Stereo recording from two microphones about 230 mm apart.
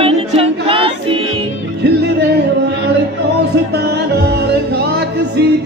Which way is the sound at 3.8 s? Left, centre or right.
Right.